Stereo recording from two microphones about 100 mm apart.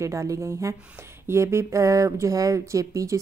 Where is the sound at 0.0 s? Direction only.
30° right (ahead or behind).